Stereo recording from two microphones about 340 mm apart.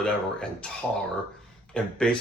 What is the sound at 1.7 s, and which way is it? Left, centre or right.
Speech, centre.